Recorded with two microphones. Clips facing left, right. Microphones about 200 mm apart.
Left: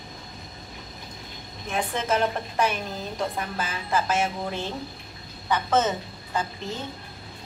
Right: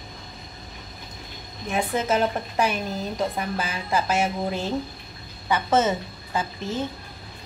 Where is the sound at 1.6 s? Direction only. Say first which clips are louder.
Right 3 dB; 5° right (ahead or behind).